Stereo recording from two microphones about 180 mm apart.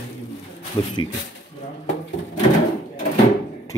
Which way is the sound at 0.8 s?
25° left (ahead or behind).